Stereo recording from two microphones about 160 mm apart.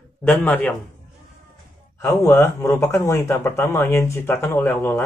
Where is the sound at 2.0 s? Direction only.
20° left (ahead or behind).